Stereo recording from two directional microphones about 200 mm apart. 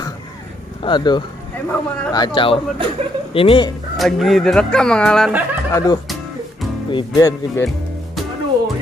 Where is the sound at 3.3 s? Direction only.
25° left (ahead or behind).